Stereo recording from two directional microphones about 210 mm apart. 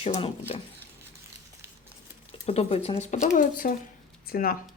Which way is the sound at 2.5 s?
30° left (ahead or behind).